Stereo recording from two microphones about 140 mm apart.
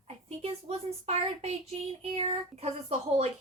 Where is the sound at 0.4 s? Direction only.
45° right (ahead or behind).